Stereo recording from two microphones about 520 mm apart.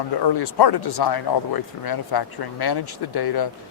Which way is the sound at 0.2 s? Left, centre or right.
Left.